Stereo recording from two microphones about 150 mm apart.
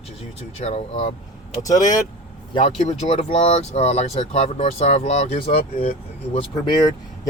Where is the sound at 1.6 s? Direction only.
25° left (ahead or behind).